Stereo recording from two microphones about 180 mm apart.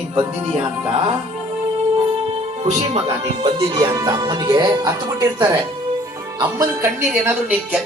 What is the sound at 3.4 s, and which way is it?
A woman's voice, 30° right (ahead or behind).